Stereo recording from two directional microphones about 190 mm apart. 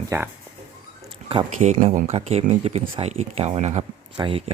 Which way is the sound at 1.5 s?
40° right (ahead or behind).